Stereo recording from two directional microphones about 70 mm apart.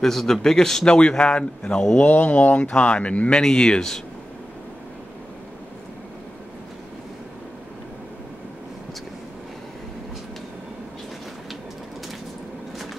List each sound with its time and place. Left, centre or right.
0.0 s a man's voice: centre